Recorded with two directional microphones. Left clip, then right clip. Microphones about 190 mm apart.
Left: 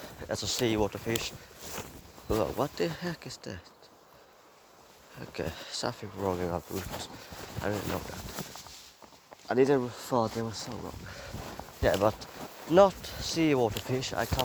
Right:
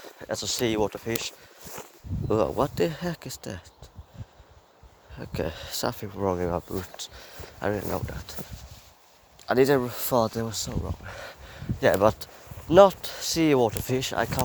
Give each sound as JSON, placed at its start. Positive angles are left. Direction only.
{"t": 0.2, "sound": "speech", "side_deg": -50}
{"t": 2.3, "sound": "speech", "side_deg": -50}
{"t": 5.3, "sound": "speech", "side_deg": -50}
{"t": 9.5, "sound": "speech", "side_deg": -55}
{"t": 11.0, "sound": "a sound", "side_deg": -50}
{"t": 11.8, "sound": "speech", "side_deg": -55}